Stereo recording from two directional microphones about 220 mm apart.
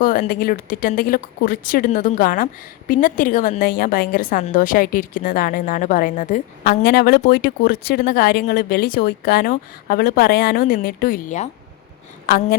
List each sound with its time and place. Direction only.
0.0 s a woman's voice: 40° left (ahead or behind)